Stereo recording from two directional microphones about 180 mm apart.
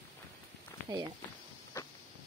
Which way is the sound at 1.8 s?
15° left (ahead or behind).